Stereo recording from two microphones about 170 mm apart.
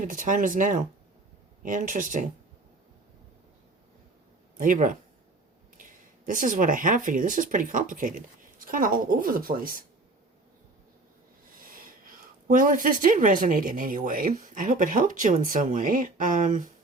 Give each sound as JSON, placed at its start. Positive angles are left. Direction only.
{"t": 0.0, "sound": "speech", "side_deg": -50}
{"t": 4.5, "sound": "speech", "side_deg": -50}
{"t": 11.6, "sound": "speech", "side_deg": -55}